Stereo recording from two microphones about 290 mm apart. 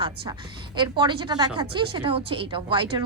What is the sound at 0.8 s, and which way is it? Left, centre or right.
Speech, centre.